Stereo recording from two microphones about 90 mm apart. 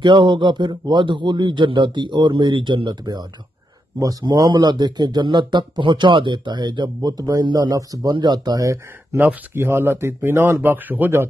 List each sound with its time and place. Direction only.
0.0 s speech: 60° right (ahead or behind)
4.0 s a man's voice: 40° right (ahead or behind)
4.3 s speech: 50° right (ahead or behind)
9.2 s speech: 25° right (ahead or behind)